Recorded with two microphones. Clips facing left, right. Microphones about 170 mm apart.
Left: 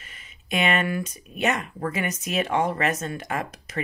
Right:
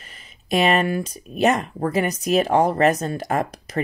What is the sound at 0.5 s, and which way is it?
Speech, 35° right (ahead or behind).